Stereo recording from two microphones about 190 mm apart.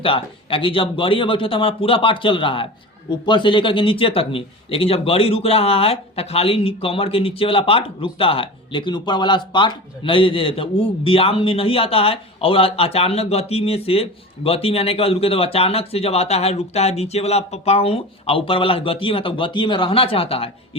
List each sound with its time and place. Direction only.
0.0 s a man's voice: 30° left (ahead or behind)